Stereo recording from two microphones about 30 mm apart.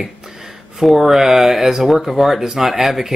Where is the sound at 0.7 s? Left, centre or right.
Centre.